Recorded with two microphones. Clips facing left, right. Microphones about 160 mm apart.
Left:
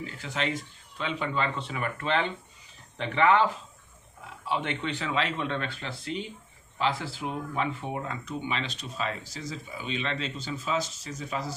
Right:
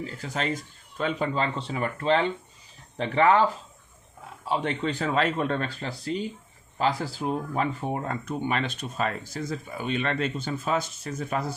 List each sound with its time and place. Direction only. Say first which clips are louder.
0.0 s speech: right 2 dB; 40° right (ahead or behind)
4.4 s speech: right 3 dB; 40° right (ahead or behind); by 11.5 s 55° right (ahead or behind)